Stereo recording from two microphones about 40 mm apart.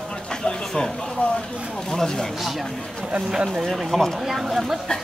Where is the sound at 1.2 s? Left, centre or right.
Left.